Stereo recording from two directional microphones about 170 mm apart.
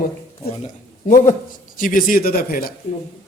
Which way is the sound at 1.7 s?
55° left (ahead or behind).